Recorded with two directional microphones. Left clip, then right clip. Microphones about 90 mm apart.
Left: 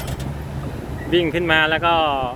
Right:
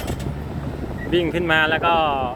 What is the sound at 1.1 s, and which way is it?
Speech, centre (ahead or behind).